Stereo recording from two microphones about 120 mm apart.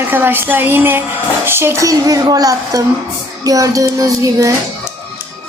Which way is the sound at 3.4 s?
30° right (ahead or behind).